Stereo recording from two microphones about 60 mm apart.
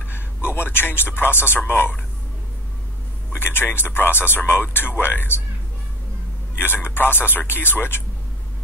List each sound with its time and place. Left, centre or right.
0.5 s a man's voice: left
3.3 s a man's voice: left
6.6 s a man's voice: left